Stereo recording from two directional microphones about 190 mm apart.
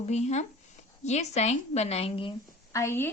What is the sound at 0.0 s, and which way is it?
A woman's voice, 35° left (ahead or behind).